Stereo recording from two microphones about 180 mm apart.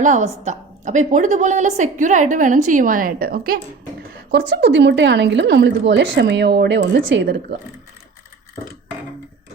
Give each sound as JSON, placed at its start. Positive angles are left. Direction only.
{"t": 0.0, "sound": "a woman's voice", "side_deg": -45}
{"t": 4.3, "sound": "a woman's voice", "side_deg": -75}